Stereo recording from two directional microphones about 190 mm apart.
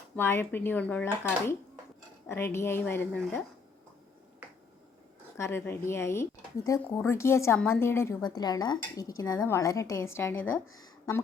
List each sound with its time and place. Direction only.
0.2 s a woman's voice: 10° left (ahead or behind)
5.4 s a woman's voice: 15° left (ahead or behind)